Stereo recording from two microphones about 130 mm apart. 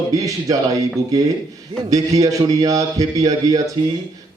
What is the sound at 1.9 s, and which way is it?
A man's voice, 25° right (ahead or behind).